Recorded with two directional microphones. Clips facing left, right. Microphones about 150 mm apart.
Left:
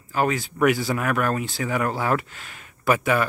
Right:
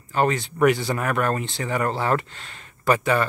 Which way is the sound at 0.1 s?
5° left (ahead or behind).